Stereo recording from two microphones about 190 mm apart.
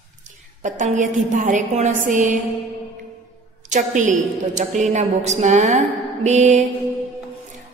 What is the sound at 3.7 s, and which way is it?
A woman's voice, 40° right (ahead or behind).